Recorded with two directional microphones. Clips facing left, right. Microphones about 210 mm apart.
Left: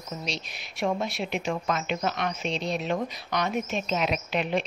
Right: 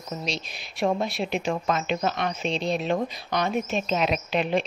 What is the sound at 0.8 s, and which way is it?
A woman's voice, 35° right (ahead or behind).